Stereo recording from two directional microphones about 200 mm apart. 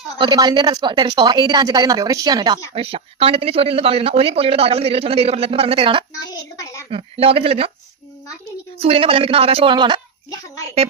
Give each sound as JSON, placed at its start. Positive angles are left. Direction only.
{"t": 0.2, "sound": "speech", "side_deg": -20}
{"t": 6.1, "sound": "a woman's voice", "side_deg": 15}
{"t": 6.9, "sound": "speech", "side_deg": -30}
{"t": 8.8, "sound": "speech", "side_deg": -30}